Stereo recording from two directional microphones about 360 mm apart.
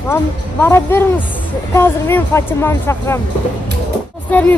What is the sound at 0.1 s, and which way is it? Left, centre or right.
Speech, centre.